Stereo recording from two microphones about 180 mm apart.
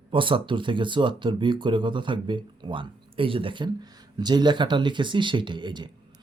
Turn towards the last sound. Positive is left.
turn(degrees=-25)  # may be behind; listen again after turning